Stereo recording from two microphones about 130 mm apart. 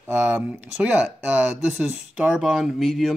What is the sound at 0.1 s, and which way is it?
Speech, 10° right (ahead or behind).